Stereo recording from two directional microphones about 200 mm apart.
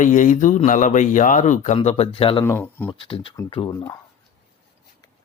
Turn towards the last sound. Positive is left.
turn(degrees=30)  # may be behind; listen again after turning